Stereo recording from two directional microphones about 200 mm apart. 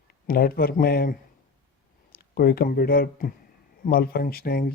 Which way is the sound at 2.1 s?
50° left (ahead or behind).